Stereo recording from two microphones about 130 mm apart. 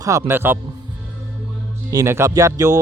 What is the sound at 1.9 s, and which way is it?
Speech, 25° right (ahead or behind).